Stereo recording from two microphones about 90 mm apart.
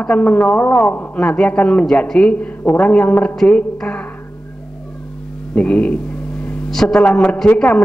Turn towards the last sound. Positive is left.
turn(degrees=15)  # may be behind; listen again after turning